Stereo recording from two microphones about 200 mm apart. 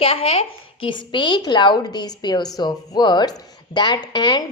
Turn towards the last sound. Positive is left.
turn(degrees=20)  # may be behind; listen again after turning